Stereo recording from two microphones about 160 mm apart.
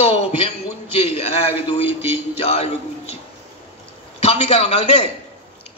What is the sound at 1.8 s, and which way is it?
Speech, 15° right (ahead or behind).